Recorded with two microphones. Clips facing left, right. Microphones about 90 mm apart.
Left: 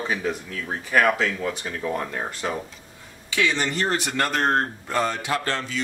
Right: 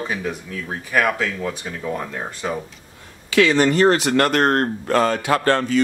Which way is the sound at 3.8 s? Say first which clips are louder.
Right 8 dB; 90° right.